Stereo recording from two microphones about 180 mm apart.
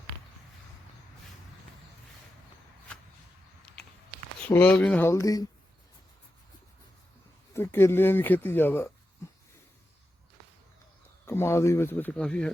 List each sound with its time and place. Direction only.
4.4 s speech: 5° left (ahead or behind)
7.5 s speech: 15° left (ahead or behind)
9.2 s a sound: 15° left (ahead or behind)
11.3 s speech: 15° left (ahead or behind)